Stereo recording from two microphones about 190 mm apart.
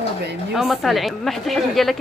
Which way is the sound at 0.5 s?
Centre (ahead or behind).